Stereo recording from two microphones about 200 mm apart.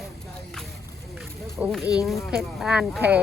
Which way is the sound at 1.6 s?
10° right (ahead or behind).